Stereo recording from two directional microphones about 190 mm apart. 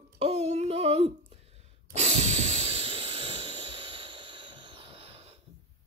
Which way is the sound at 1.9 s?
35° right (ahead or behind).